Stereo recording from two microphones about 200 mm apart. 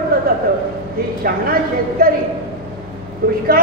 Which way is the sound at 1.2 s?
45° right (ahead or behind).